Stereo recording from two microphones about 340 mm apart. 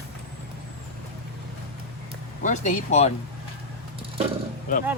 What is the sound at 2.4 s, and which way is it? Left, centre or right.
Speech, left.